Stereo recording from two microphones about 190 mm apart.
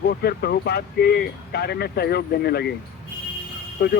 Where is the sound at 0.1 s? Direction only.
55° left (ahead or behind).